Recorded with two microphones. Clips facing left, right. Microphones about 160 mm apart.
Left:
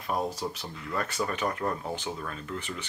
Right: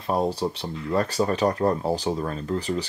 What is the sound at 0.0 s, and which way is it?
Speech, 30° right (ahead or behind).